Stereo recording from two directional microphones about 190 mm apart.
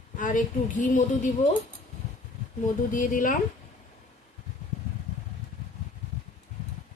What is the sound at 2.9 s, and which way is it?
Speech, 45° left (ahead or behind).